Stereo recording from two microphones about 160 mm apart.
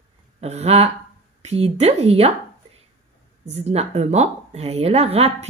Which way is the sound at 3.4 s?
40° right (ahead or behind).